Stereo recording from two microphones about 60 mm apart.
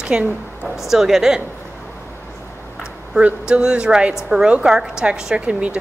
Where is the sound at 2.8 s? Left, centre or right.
Centre.